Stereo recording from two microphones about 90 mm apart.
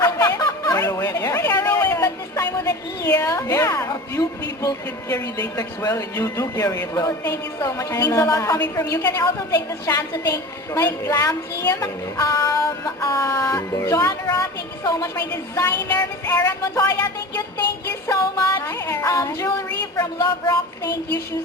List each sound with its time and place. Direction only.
0.0 s music: 35° left (ahead or behind)
0.3 s music: 45° left (ahead or behind)
8.5 s a woman's voice: 20° left (ahead or behind)
8.9 s music: 40° left (ahead or behind)
11.7 s speech: 40° left (ahead or behind)
13.8 s music: 40° left (ahead or behind)
20.5 s child singing: 45° left (ahead or behind)